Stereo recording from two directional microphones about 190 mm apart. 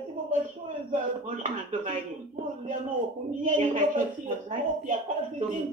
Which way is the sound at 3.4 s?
40° right (ahead or behind).